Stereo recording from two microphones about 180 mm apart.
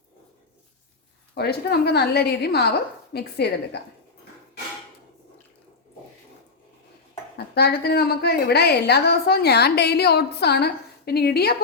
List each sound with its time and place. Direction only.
1.4 s a woman's voice: 60° left (ahead or behind)
7.3 s a woman's voice: 65° left (ahead or behind)